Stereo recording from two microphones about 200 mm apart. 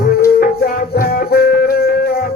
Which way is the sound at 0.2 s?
45° left (ahead or behind).